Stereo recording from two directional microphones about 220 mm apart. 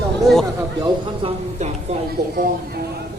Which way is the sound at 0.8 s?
25° right (ahead or behind).